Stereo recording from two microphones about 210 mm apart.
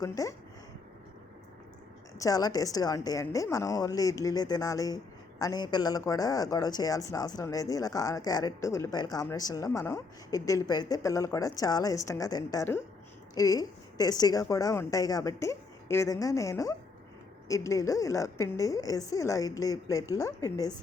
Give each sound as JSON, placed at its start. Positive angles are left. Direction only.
{"t": 0.0, "sound": "speech", "side_deg": 15}
{"t": 2.1, "sound": "speech", "side_deg": 15}